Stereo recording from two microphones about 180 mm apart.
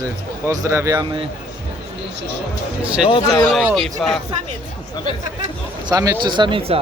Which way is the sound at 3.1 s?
20° left (ahead or behind).